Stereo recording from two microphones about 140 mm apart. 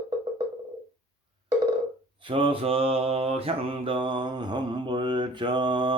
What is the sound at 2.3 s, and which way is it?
Mantra, 40° right (ahead or behind).